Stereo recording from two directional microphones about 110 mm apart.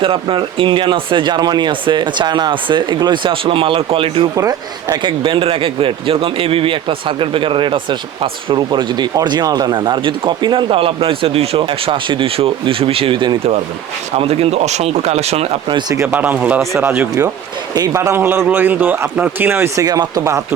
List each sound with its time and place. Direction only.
0.0 s speech: 50° right (ahead or behind)
4.4 s a man's voice: 30° right (ahead or behind)
5.0 s speech: 50° right (ahead or behind)
14.2 s speech: 65° right (ahead or behind)
16.0 s a man's voice: 15° right (ahead or behind)
17.7 s a man's voice: 30° right (ahead or behind)